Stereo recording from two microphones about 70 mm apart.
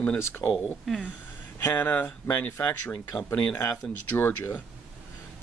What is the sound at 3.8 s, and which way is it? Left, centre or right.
Speech, centre.